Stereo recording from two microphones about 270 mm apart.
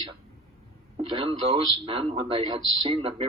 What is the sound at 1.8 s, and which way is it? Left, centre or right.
Speech, right.